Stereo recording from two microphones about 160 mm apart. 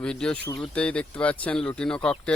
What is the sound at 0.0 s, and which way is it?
Speech, 5° left (ahead or behind).